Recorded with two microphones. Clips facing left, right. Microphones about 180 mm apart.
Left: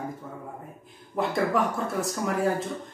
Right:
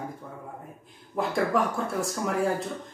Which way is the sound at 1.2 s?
Centre (ahead or behind).